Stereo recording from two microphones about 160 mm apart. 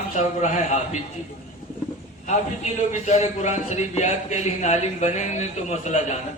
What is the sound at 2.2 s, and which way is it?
A man's voice, 45° left (ahead or behind).